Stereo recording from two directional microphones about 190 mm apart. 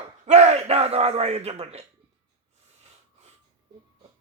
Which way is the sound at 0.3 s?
35° right (ahead or behind).